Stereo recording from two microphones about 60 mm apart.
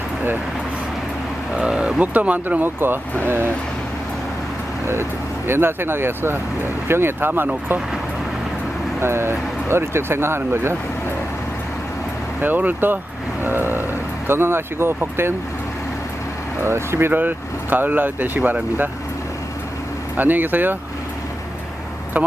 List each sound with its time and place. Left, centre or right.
1.5 s speech: centre
2.0 s speech: right
5.5 s speech: right
9.0 s speech: right
12.4 s speech: right
16.6 s speech: right
17.1 s speech: right
20.1 s speech: right